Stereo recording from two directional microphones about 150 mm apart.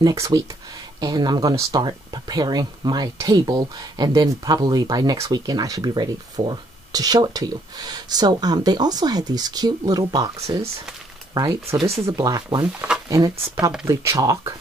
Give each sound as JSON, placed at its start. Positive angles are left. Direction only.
{"t": 0.0, "sound": "speech", "side_deg": -25}
{"t": 11.7, "sound": "speech", "side_deg": -40}
{"t": 12.1, "sound": "speech", "side_deg": -25}